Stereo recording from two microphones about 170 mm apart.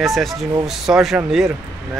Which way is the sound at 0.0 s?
Centre (ahead or behind).